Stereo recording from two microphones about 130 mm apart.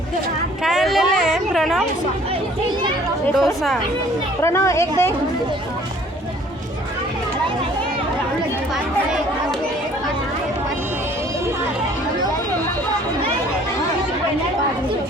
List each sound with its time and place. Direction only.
0.6 s a sound: centre (ahead or behind)
3.3 s speech: centre (ahead or behind)
4.4 s speech: 25° left (ahead or behind)